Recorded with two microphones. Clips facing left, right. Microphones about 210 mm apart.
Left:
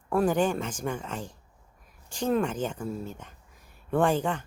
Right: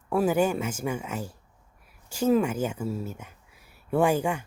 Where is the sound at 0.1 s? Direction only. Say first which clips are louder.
Right 1 dB; 5° right (ahead or behind).